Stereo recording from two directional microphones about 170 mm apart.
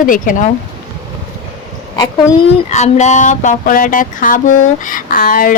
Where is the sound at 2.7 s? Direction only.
40° left (ahead or behind).